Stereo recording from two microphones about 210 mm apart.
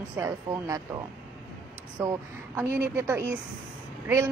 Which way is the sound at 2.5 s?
15° right (ahead or behind).